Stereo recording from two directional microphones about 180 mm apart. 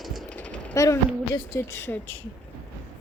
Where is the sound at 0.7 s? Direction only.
15° left (ahead or behind).